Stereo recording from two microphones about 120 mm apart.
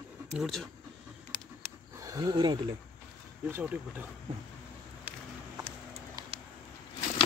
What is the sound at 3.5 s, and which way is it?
Speech, 15° right (ahead or behind).